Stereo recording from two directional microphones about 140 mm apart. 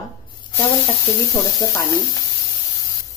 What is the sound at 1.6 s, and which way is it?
Speech, 25° left (ahead or behind).